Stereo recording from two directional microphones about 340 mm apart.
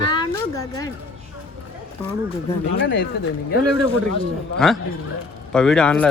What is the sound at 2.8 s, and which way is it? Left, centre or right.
Speech, left.